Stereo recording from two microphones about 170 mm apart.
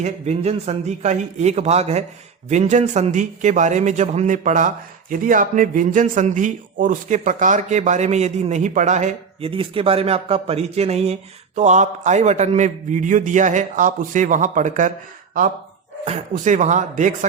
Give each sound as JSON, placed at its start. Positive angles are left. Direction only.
{"t": 0.0, "sound": "a man's voice", "side_deg": -40}
{"t": 16.0, "sound": "a man's voice", "side_deg": -45}